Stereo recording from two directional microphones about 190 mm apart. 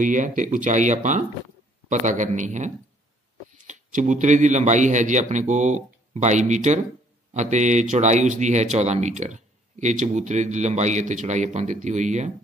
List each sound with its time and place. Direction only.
0.0 s speech: 40° right (ahead or behind)